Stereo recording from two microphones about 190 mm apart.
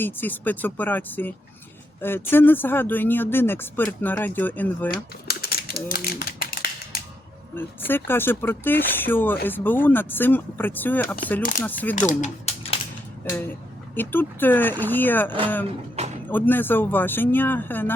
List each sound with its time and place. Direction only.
0.0 s speech: 10° left (ahead or behind)
5.3 s typewriter: 55° left (ahead or behind)
7.5 s speech: 10° left (ahead or behind)
11.9 s speech: 40° left (ahead or behind)
13.2 s speech: 10° left (ahead or behind)
16.0 s a sound: 35° right (ahead or behind)
16.3 s speech: 10° left (ahead or behind)